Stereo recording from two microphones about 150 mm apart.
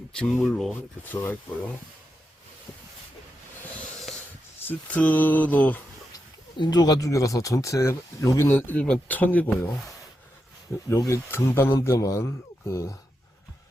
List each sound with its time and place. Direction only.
0.2 s speech: centre (ahead or behind)
1.0 s speech: 10° left (ahead or behind)
4.6 s speech: 10° left (ahead or behind)
6.6 s speech: 30° left (ahead or behind); by 9.6 s 10° left (ahead or behind)
10.8 s speech: 20° left (ahead or behind)